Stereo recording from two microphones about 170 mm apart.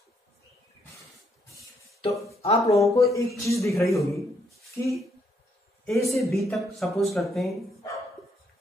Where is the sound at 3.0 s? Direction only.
20° left (ahead or behind).